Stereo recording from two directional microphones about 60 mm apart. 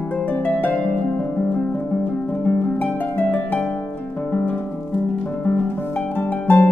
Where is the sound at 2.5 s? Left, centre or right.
Left.